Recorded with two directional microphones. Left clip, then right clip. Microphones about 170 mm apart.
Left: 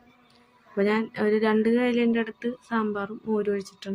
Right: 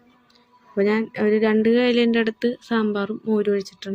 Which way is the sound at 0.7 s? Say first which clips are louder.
Right 4 dB; 15° right (ahead or behind).